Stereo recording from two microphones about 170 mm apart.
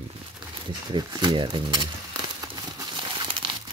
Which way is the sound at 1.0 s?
30° right (ahead or behind).